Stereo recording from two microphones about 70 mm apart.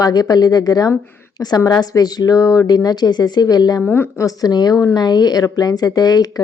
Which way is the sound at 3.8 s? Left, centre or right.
Left.